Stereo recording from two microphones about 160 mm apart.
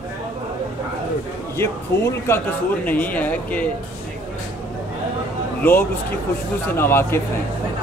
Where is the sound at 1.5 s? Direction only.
15° left (ahead or behind).